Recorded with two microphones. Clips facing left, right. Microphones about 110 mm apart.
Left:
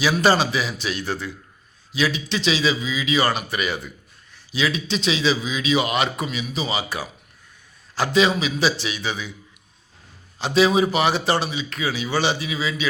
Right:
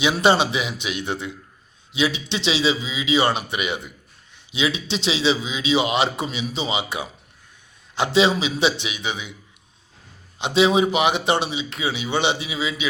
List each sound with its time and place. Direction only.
0.0 s a man's voice: 25° right (ahead or behind)
10.3 s a man's voice: 20° right (ahead or behind)